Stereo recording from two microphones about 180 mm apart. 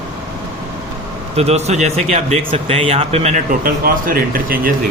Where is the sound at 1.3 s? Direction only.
35° right (ahead or behind); by 4.7 s 50° right (ahead or behind).